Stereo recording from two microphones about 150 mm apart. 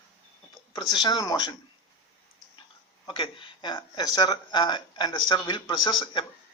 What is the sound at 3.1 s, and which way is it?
Speech, 35° left (ahead or behind).